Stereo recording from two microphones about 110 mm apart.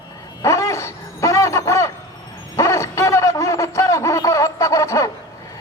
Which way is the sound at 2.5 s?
30° left (ahead or behind).